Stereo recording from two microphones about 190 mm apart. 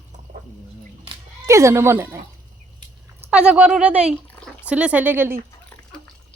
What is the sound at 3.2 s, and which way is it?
Speech, 5° right (ahead or behind).